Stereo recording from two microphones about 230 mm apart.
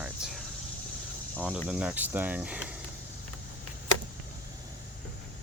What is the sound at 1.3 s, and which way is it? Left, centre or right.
Speech, centre.